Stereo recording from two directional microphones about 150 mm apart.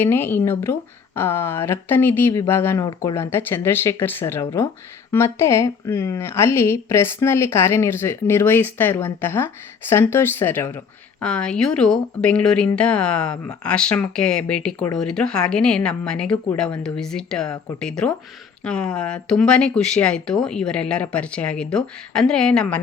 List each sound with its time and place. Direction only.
0.0 s speech: 15° left (ahead or behind)